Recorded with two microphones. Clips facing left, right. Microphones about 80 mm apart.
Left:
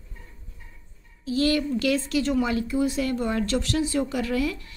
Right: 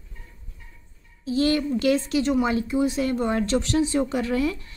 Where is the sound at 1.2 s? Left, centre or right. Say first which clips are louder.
Right 1 dB; right.